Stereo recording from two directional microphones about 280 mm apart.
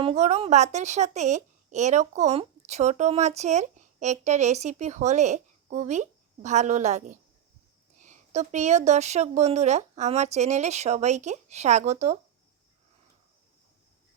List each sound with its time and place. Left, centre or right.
0.0 s a woman's voice: right